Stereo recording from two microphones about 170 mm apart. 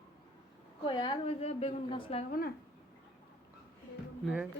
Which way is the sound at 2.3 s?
60° left (ahead or behind).